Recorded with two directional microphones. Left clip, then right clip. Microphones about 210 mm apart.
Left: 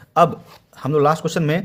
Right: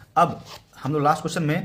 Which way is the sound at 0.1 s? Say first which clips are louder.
Left 4 dB; 50° left (ahead or behind).